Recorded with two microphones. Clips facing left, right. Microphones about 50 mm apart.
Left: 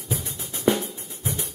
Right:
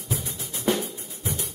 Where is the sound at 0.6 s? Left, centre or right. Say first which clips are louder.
Left 3 dB; left.